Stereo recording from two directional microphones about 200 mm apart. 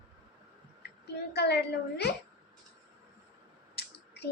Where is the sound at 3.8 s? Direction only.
55° left (ahead or behind).